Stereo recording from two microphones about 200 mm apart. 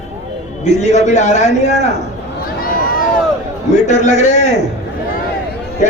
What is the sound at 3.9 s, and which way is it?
Speech, 35° left (ahead or behind).